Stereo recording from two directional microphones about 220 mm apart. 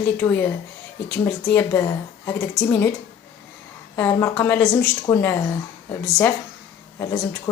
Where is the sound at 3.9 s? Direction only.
10° left (ahead or behind).